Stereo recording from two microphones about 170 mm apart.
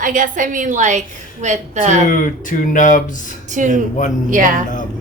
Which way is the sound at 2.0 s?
50° left (ahead or behind).